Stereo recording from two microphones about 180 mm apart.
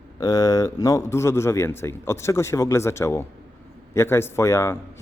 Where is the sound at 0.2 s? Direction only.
20° left (ahead or behind).